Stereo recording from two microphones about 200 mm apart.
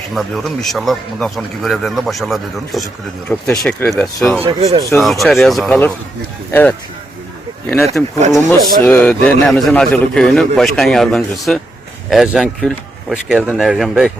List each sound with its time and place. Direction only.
0.1 s speech: centre (ahead or behind)
4.4 s speech: 25° right (ahead or behind)
4.9 s speech: centre (ahead or behind)
8.0 s speech: 15° left (ahead or behind)